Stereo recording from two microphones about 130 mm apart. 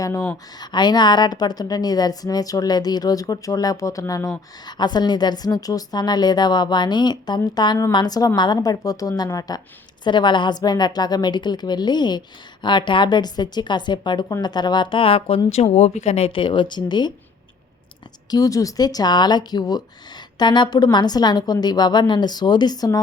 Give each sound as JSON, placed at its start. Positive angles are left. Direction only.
{"t": 0.0, "sound": "a woman's voice", "side_deg": 25}
{"t": 18.3, "sound": "speech", "side_deg": 30}